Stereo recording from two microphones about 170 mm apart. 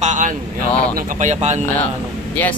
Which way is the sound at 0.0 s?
45° right (ahead or behind).